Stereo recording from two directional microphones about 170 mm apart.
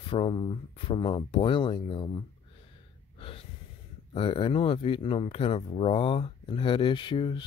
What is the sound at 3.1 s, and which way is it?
Gasp, 30° left (ahead or behind).